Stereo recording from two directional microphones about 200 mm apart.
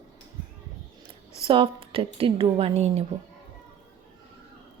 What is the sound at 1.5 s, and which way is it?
A woman's voice, 25° right (ahead or behind).